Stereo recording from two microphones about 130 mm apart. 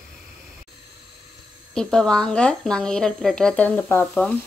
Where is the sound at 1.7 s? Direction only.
5° left (ahead or behind).